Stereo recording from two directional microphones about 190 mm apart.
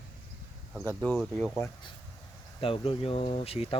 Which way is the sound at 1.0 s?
5° left (ahead or behind).